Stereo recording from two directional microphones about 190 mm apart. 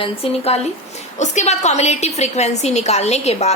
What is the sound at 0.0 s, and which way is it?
A woman's voice, 30° left (ahead or behind).